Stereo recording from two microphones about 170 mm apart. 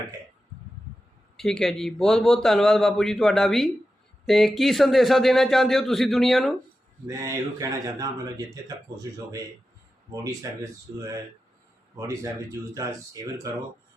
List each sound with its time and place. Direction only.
1.4 s a man's voice: centre (ahead or behind)
7.1 s speech: 20° right (ahead or behind)
11.9 s speech: 20° right (ahead or behind)